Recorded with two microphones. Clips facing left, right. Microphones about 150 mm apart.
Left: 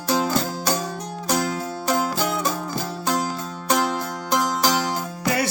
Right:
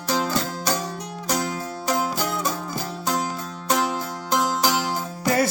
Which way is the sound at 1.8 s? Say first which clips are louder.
Left 1 dB; centre (ahead or behind).